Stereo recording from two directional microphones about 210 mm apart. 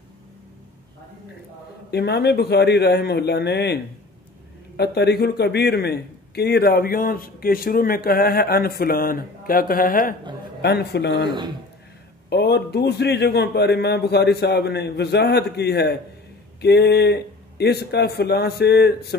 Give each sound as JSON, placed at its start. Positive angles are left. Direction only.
{"t": 1.9, "sound": "a man's voice", "side_deg": 50}
{"t": 11.2, "sound": "a man's voice", "side_deg": -20}
{"t": 12.3, "sound": "a man's voice", "side_deg": 55}